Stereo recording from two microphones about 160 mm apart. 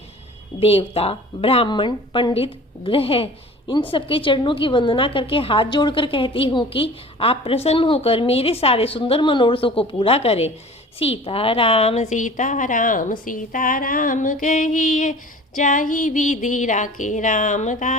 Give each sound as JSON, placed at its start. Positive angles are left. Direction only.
{"t": 0.6, "sound": "a woman's voice", "side_deg": 35}
{"t": 13.2, "sound": "a sound", "side_deg": 55}
{"t": 15.5, "sound": "a woman's voice", "side_deg": 55}